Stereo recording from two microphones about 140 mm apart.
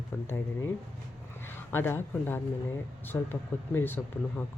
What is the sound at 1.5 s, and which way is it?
Speech, 15° left (ahead or behind).